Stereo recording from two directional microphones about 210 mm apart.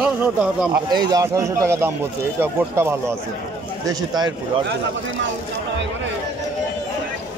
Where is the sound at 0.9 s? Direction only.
20° right (ahead or behind).